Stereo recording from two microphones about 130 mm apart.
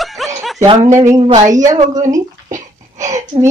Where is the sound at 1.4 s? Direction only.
70° right (ahead or behind).